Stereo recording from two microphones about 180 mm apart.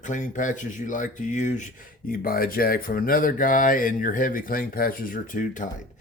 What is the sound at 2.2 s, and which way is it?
Speech, 55° left (ahead or behind).